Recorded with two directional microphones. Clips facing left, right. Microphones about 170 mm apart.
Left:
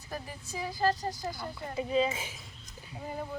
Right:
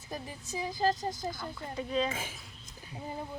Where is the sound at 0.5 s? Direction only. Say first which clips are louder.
Even; 20° right (ahead or behind).